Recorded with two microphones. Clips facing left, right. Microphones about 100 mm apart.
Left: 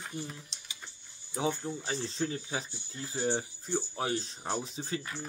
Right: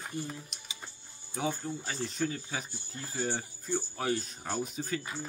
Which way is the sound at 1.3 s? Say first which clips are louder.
Left 1 dB; 20° left (ahead or behind).